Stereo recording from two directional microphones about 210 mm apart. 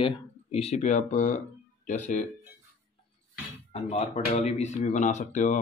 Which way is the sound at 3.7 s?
30° left (ahead or behind).